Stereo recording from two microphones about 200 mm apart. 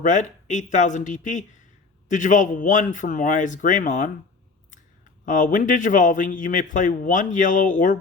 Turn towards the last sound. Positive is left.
turn(degrees=40)  # may be behind; listen again after turning